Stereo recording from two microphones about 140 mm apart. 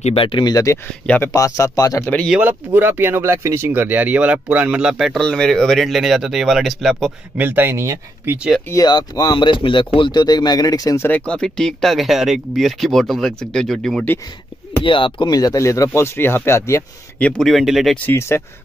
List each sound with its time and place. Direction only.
0.0 s speech: 40° left (ahead or behind)
1.0 s speech: 10° left (ahead or behind)
1.3 s speech: 25° left (ahead or behind)
2.2 s speech: 10° right (ahead or behind)
7.3 s speech: 15° right (ahead or behind)
8.4 s speech: centre (ahead or behind)
8.6 s speech: 25° left (ahead or behind)
11.1 s speech: 10° left (ahead or behind)
14.8 s speech: 35° left (ahead or behind); by 16.8 s 20° left (ahead or behind)
17.2 s speech: centre (ahead or behind)
17.9 s speech: 15° left (ahead or behind)